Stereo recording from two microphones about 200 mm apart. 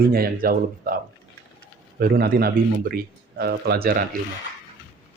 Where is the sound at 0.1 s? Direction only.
50° right (ahead or behind).